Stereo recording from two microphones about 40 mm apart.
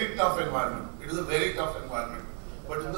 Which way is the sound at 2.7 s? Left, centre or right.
Centre.